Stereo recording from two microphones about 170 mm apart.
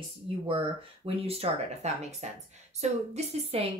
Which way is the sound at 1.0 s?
35° right (ahead or behind).